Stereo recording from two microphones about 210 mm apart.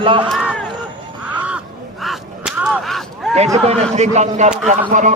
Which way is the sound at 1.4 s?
5° right (ahead or behind).